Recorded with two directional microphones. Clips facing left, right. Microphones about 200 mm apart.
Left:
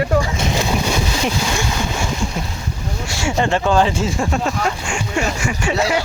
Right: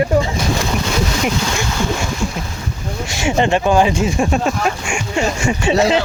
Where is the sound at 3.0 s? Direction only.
20° right (ahead or behind).